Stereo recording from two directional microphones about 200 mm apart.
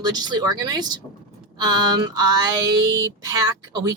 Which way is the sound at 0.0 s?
20° right (ahead or behind).